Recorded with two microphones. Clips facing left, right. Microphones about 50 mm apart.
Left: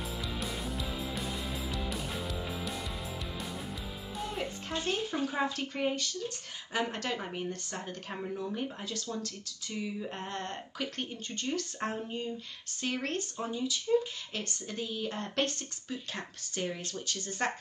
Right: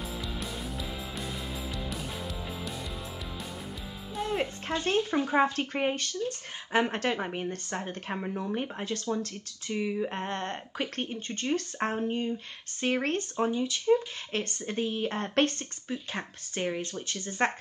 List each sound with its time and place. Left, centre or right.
0.2 s music: centre
4.3 s speech: right